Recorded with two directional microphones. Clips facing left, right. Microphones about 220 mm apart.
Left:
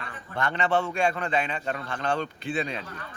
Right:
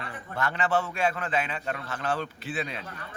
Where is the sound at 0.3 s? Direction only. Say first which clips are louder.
Left 2 dB; 5° right (ahead or behind).